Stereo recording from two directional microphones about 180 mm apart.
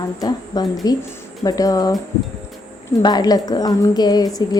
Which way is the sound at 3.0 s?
25° left (ahead or behind).